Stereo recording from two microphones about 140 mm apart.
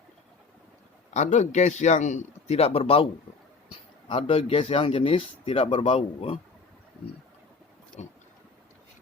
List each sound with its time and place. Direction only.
1.1 s a man's voice: 55° left (ahead or behind)
4.1 s speech: 45° left (ahead or behind)
8.0 s a man's voice: 55° left (ahead or behind)